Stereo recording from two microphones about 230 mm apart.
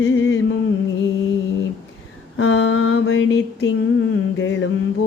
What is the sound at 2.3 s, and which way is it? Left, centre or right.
Mantra, left.